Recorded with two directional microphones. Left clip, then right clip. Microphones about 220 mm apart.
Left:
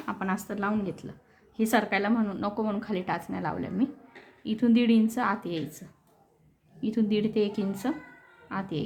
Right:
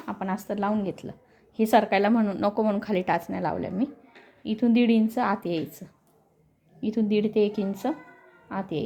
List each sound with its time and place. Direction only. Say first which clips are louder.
0.0 s a sound: even; 15° right (ahead or behind)
0.4 s a woman's voice: right 3 dB; 25° right (ahead or behind)
6.8 s a woman's voice: right 3 dB; 20° right (ahead or behind)